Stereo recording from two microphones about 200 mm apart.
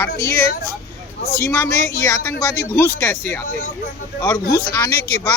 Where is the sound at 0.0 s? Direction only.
15° left (ahead or behind).